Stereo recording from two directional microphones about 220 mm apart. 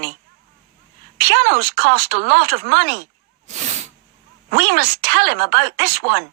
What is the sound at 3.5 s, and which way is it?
Sneeze, 30° right (ahead or behind).